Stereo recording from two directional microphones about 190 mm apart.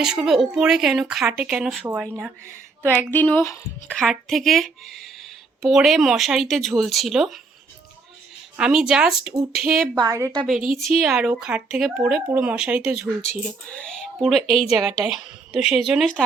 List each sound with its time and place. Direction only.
0.0 s speech: 5° right (ahead or behind)
3.1 s speech: 10° left (ahead or behind)
3.9 s speech: centre (ahead or behind)
8.5 s speech: 5° right (ahead or behind)
10.0 s a woman's voice: 15° right (ahead or behind)
10.6 s speech: 30° left (ahead or behind)
10.8 s speech: 5° right (ahead or behind)
13.7 s speech: 5° left (ahead or behind)